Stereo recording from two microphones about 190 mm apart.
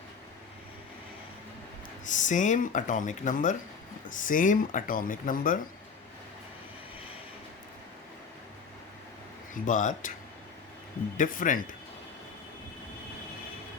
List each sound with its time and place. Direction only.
2.0 s speech: 40° left (ahead or behind)
9.6 s speech: 45° left (ahead or behind)
11.2 s speech: 45° left (ahead or behind)